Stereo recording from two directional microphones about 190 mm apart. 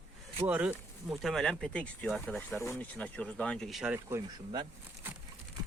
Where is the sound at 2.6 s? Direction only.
15° left (ahead or behind); by 4.2 s 5° right (ahead or behind).